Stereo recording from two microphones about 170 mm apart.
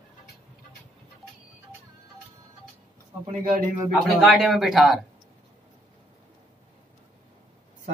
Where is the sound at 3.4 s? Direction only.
55° right (ahead or behind).